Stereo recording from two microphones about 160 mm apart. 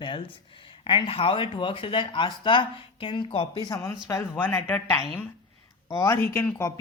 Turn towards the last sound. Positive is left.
turn(degrees=15)  # may be behind; listen again after turning